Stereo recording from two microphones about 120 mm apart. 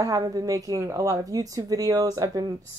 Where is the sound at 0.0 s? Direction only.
30° right (ahead or behind).